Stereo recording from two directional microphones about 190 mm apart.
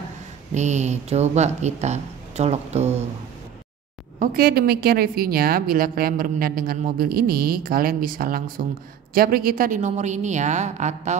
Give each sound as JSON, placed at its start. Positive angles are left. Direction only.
{"t": 0.6, "sound": "speech", "side_deg": -40}
{"t": 4.2, "sound": "a woman's voice", "side_deg": -50}